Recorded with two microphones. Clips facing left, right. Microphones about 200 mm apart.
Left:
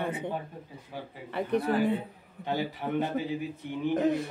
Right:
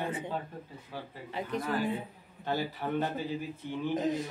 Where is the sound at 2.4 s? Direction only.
15° left (ahead or behind).